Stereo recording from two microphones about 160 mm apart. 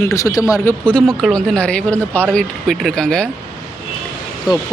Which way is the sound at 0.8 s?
5° left (ahead or behind).